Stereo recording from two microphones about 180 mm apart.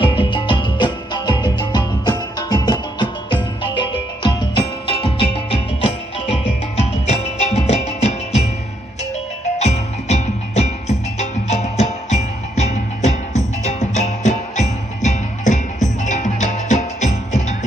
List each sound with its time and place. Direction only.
0.0 s music: 30° left (ahead or behind)
9.6 s music: 35° left (ahead or behind)